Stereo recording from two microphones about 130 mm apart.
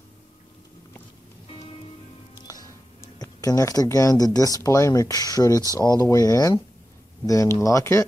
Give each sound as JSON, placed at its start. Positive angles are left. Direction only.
{"t": 2.4, "sound": "music", "side_deg": 30}
{"t": 3.2, "sound": "speech", "side_deg": 25}